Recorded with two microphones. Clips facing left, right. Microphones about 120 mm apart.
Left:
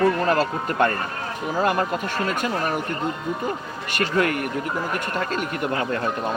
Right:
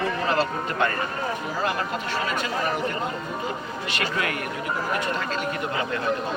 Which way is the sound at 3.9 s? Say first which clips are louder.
Left 7 dB; 45° left (ahead or behind).